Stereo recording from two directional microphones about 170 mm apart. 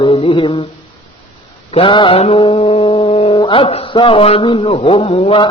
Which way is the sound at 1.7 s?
30° left (ahead or behind).